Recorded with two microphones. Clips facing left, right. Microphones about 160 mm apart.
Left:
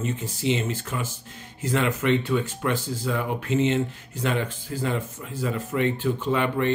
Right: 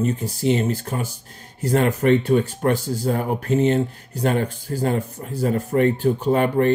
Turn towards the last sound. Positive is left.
turn(degrees=-45)  # may be behind; listen again after turning